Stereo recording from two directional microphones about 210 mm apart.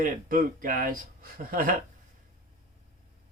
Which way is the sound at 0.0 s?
40° right (ahead or behind).